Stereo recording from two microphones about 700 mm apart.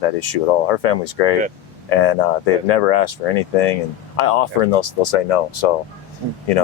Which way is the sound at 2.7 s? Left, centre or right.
Left.